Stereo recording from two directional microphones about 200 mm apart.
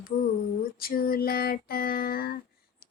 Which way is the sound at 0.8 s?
45° left (ahead or behind).